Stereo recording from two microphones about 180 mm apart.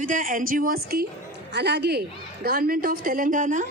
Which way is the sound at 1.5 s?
70° right (ahead or behind).